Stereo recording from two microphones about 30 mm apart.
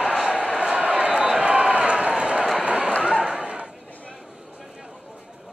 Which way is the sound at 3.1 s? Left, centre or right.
Right.